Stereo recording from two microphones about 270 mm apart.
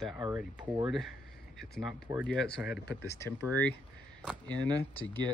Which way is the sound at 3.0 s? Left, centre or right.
Centre.